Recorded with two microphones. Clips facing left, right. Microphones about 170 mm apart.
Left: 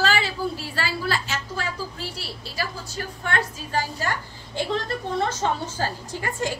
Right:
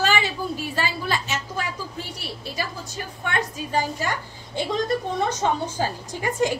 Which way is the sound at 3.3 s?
20° right (ahead or behind).